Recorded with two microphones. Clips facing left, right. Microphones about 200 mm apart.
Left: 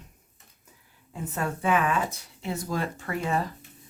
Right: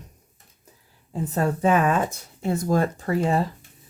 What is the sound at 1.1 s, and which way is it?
Speech, 35° right (ahead or behind).